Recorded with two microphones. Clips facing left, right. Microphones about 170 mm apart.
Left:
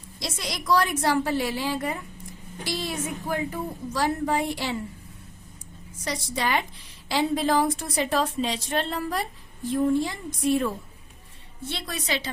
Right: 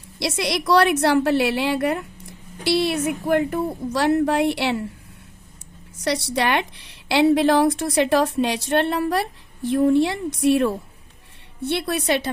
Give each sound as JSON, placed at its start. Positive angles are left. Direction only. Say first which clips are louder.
{"t": 0.2, "sound": "a woman's voice", "louder": "right 10 dB", "side_deg": -75}
{"t": 6.0, "sound": "a woman's voice", "louder": "right 7 dB", "side_deg": -75}